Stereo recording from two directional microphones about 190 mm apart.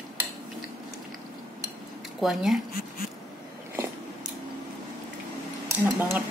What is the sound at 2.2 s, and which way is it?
Speech, centre (ahead or behind).